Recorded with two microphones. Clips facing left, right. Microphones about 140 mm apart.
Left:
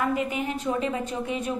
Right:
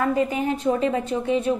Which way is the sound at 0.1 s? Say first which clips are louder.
Right 5 dB; 30° right (ahead or behind).